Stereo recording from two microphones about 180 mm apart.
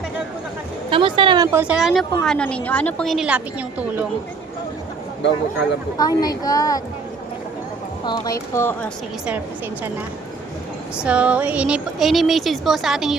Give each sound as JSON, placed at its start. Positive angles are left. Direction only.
{"t": 0.9, "sound": "speech", "side_deg": -30}
{"t": 1.5, "sound": "a woman's voice", "side_deg": -5}
{"t": 6.0, "sound": "a woman's voice", "side_deg": 20}
{"t": 8.0, "sound": "a woman's voice", "side_deg": 25}
{"t": 10.9, "sound": "a woman's voice", "side_deg": -5}